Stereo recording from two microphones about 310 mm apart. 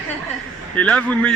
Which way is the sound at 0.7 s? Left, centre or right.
Centre.